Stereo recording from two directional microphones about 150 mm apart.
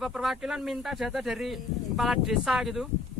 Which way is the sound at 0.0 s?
Centre (ahead or behind).